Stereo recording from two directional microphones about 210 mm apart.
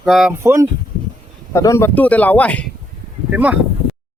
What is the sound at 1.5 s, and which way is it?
Speech, 15° left (ahead or behind).